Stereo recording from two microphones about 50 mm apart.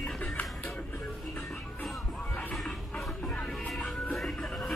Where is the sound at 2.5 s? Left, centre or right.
Centre.